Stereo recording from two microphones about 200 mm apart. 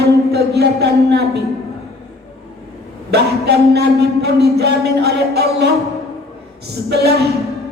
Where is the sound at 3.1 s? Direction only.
55° right (ahead or behind).